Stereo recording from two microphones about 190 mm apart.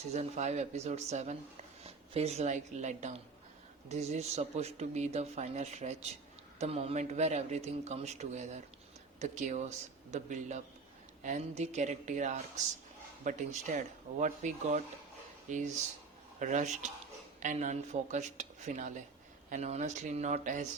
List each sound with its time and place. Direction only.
0.1 s speech: 35° right (ahead or behind)